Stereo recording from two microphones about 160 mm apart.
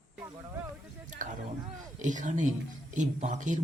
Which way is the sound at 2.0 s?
50° right (ahead or behind).